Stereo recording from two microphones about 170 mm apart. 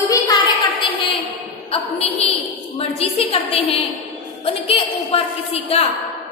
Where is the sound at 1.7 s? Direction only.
35° left (ahead or behind).